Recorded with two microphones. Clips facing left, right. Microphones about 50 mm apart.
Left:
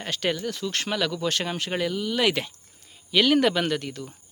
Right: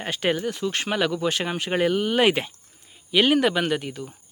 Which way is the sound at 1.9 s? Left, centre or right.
Right.